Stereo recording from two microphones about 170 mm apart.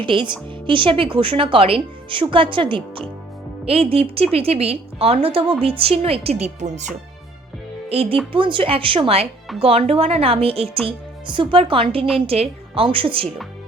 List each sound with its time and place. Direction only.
0.0 s a woman's voice: 30° right (ahead or behind)
8.3 s a woman's voice: 30° right (ahead or behind)